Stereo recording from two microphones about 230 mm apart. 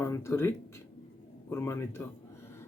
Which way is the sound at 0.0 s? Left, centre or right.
Centre.